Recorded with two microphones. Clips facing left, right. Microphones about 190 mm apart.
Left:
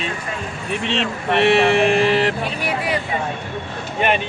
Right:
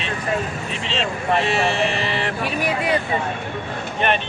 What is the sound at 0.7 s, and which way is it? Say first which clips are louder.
Speech: left 8 dB; 65° left (ahead or behind).